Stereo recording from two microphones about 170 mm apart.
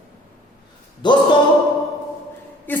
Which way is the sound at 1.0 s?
25° left (ahead or behind).